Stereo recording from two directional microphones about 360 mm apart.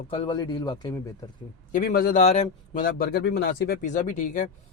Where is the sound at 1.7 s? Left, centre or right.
Left.